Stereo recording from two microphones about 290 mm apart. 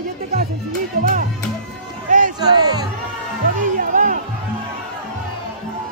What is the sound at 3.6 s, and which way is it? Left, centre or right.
Music, right.